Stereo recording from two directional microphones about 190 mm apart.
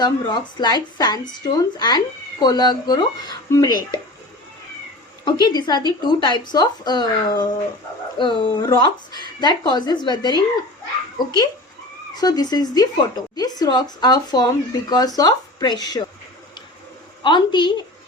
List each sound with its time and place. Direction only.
0.0 s speech: 20° left (ahead or behind)
5.2 s speech: 20° left (ahead or behind)
12.1 s speech: 20° left (ahead or behind)
17.2 s speech: 25° left (ahead or behind)